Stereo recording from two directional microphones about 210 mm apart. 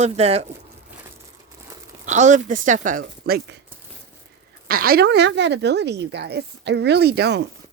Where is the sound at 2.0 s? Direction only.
35° right (ahead or behind).